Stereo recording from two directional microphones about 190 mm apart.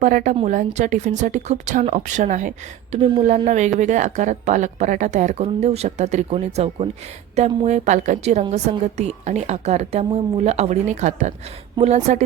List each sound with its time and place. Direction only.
0.0 s a woman's voice: 45° right (ahead or behind)